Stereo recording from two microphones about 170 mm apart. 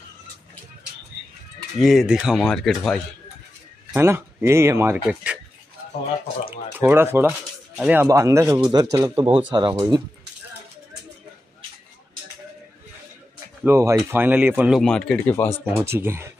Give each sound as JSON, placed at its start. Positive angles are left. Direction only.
{"t": 1.8, "sound": "speech", "side_deg": 0}
{"t": 3.9, "sound": "speech", "side_deg": -15}
{"t": 6.8, "sound": "a man's voice", "side_deg": -15}
{"t": 13.7, "sound": "speech", "side_deg": -15}
{"t": 14.8, "sound": "speech", "side_deg": 5}
{"t": 15.6, "sound": "speech", "side_deg": -10}